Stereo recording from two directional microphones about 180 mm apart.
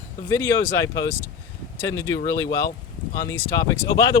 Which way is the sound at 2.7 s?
50° left (ahead or behind).